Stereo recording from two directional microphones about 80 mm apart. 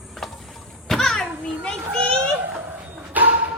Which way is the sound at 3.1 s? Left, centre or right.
Right.